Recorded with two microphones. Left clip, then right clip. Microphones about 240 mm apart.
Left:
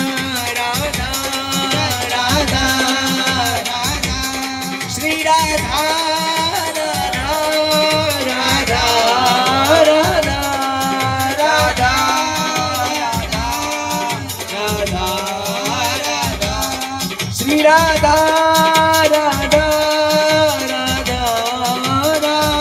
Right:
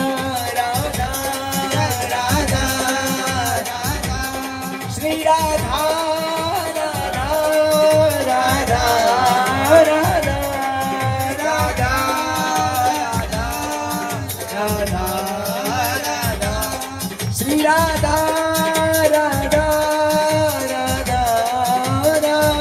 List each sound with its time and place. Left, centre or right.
2.2 s music: left
5.0 s music: left
7.7 s music: left
11.5 s music: left
17.5 s music: left